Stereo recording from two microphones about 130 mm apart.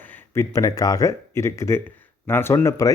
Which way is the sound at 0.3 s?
25° left (ahead or behind).